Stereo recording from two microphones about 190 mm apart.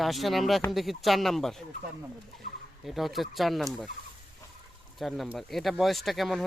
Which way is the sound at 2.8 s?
Centre (ahead or behind).